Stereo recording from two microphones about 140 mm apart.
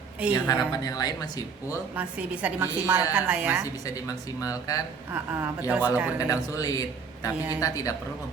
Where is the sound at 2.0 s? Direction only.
10° right (ahead or behind).